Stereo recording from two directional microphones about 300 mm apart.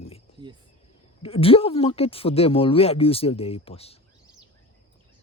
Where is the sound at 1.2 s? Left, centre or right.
Centre.